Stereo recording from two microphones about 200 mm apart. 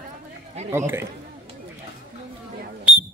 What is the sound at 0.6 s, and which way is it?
Speech, 10° right (ahead or behind).